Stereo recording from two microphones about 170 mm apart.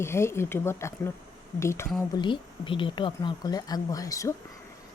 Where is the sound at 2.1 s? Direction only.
30° left (ahead or behind).